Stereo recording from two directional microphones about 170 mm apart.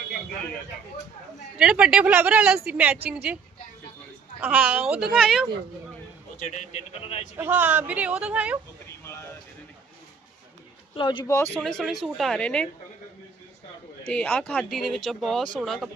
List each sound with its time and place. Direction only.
1.5 s speech: 5° right (ahead or behind)
4.4 s speech: 10° right (ahead or behind)
6.4 s a man's voice: 45° left (ahead or behind)
7.3 s speech: 10° right (ahead or behind)
10.9 s speech: 30° left (ahead or behind)
11.6 s speech: 5° left (ahead or behind)
14.1 s speech: 5° left (ahead or behind)